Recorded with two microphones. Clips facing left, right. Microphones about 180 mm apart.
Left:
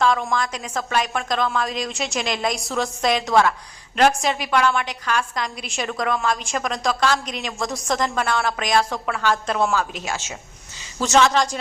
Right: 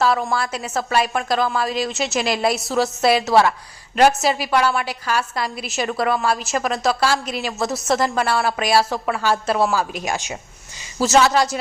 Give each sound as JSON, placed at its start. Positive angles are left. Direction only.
{"t": 0.0, "sound": "a woman's voice", "side_deg": -5}
{"t": 11.0, "sound": "a woman's voice", "side_deg": -5}